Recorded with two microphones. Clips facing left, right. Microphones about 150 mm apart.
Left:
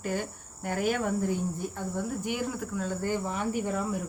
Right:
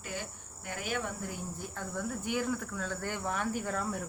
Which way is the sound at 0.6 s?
45° left (ahead or behind).